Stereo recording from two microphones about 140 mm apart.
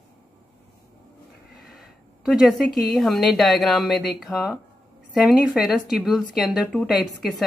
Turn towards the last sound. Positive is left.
turn(degrees=0)  # may be behind; listen again after turning